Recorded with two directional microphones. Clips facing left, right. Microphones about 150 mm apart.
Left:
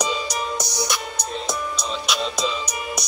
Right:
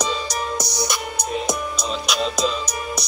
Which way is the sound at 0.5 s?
20° right (ahead or behind).